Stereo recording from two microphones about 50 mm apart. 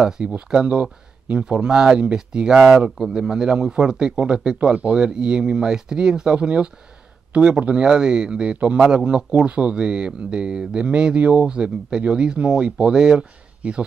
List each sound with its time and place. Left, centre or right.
0.5 s a man's voice: centre